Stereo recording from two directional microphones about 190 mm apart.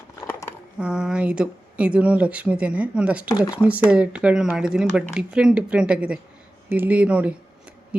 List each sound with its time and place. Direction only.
0.2 s a sound: 15° left (ahead or behind)
0.8 s speech: 5° right (ahead or behind)
3.2 s speech: 20° left (ahead or behind)
3.5 s speech: 5° right (ahead or behind)